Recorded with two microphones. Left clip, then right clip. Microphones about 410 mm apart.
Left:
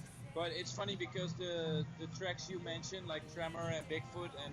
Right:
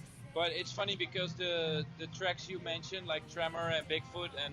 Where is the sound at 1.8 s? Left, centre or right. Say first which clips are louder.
Right 6 dB; centre.